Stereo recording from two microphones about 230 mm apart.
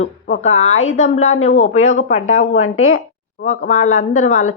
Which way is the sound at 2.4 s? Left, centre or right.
Left.